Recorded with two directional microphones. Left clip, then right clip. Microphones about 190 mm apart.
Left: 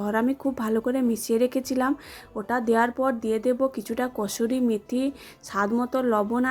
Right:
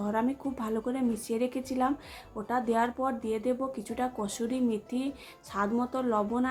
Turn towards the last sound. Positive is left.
turn(degrees=30)  # may be behind; listen again after turning